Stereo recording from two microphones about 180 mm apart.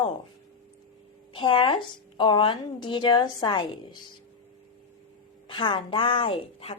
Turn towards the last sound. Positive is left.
turn(degrees=30)  # may be behind; listen again after turning